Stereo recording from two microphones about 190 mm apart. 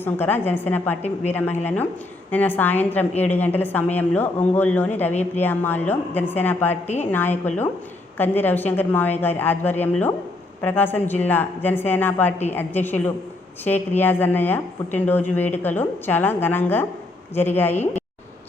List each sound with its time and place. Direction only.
0.0 s speech: 10° left (ahead or behind)
6.8 s a woman's voice: 35° left (ahead or behind)
7.1 s speech: 10° left (ahead or behind)